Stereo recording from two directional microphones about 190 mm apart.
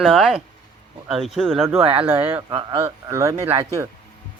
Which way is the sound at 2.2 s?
10° right (ahead or behind).